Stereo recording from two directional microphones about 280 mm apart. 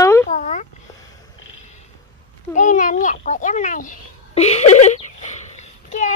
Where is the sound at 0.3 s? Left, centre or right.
Left.